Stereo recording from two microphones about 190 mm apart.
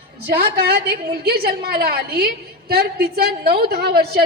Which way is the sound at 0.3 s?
55° right (ahead or behind).